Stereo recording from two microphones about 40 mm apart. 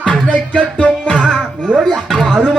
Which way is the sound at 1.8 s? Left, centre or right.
Centre.